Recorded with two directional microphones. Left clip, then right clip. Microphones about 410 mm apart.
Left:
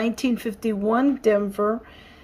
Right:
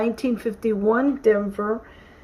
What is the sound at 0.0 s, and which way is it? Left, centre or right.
Speech, centre.